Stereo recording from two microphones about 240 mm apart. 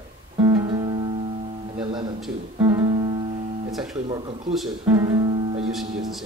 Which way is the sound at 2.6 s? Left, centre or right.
Centre.